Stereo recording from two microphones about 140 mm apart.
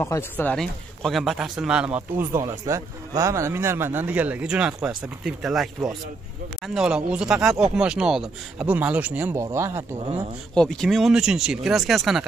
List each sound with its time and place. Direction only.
0.0 s speech: 15° left (ahead or behind); by 9.8 s 20° right (ahead or behind)
10.5 s speech: 5° left (ahead or behind)